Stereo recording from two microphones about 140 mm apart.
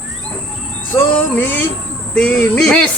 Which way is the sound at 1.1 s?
15° left (ahead or behind).